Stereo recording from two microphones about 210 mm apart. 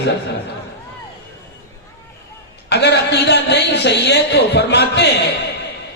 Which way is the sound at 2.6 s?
55° left (ahead or behind).